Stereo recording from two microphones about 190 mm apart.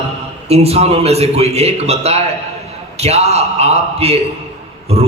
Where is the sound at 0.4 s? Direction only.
35° right (ahead or behind).